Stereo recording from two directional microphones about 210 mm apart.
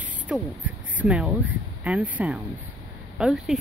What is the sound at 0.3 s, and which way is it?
Speech, 5° right (ahead or behind).